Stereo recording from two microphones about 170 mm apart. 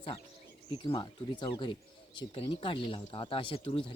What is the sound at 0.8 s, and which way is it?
Speech, 30° left (ahead or behind).